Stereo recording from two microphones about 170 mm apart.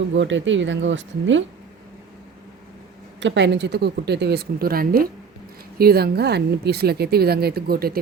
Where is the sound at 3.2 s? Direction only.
90° right.